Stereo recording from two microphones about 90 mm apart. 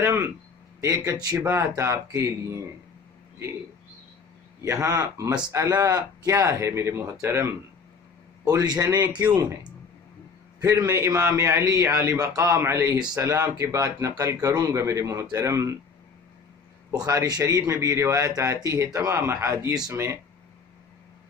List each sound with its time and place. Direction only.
0.0 s speech: 30° right (ahead or behind)
4.6 s speech: 35° right (ahead or behind)
8.4 s speech: 45° right (ahead or behind)
10.6 s a man's voice: 40° right (ahead or behind)
10.8 s a man's voice: 25° right (ahead or behind)
16.9 s a man's voice: 45° right (ahead or behind); by 20.1 s 30° right (ahead or behind)